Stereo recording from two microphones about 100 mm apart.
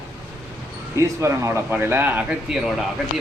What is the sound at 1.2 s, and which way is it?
Speech, 30° right (ahead or behind).